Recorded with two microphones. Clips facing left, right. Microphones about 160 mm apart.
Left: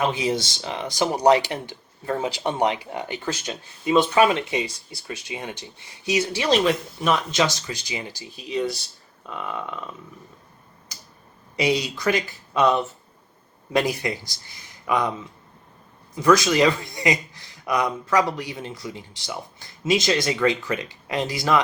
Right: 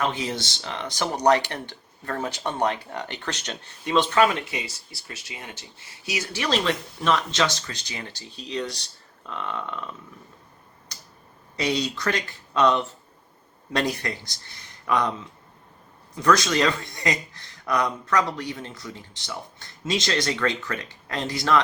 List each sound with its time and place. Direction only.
0.0 s speech: 10° left (ahead or behind)
4.3 s speech: 25° left (ahead or behind); by 9.9 s 5° left (ahead or behind)
11.5 s speech: 10° left (ahead or behind)
16.1 s speech: 5° left (ahead or behind)